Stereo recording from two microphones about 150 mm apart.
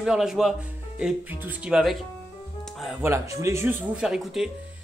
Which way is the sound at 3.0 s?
20° right (ahead or behind).